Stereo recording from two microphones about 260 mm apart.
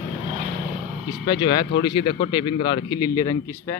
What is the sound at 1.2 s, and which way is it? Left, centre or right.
A man's voice, centre.